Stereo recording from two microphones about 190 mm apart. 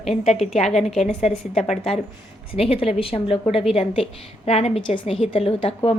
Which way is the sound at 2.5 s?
30° left (ahead or behind).